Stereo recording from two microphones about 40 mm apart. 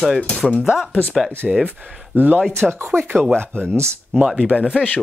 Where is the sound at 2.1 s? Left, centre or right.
Right.